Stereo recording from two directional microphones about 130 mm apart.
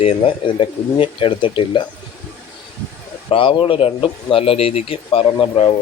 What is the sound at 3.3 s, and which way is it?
Speech, 40° left (ahead or behind).